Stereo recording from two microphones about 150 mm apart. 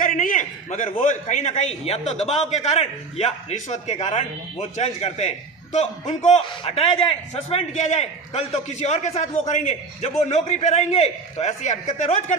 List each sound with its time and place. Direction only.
0.0 s a man's voice: 65° left (ahead or behind); by 6.4 s 50° left (ahead or behind)
6.4 s a man's voice: 40° left (ahead or behind)